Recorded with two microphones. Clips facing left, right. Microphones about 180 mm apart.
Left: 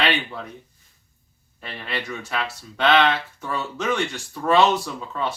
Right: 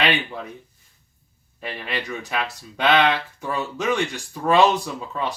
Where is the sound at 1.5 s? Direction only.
15° right (ahead or behind).